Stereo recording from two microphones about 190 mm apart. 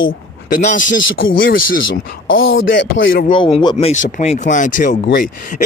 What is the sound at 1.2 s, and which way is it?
Speech, 90° left.